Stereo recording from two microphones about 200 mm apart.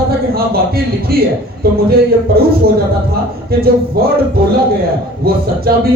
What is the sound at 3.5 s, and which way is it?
Speech, 50° right (ahead or behind).